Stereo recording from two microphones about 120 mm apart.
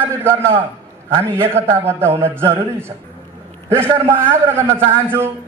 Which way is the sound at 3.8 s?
20° right (ahead or behind).